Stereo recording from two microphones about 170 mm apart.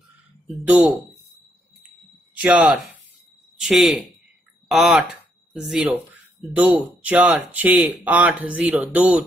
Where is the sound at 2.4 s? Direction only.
5° right (ahead or behind).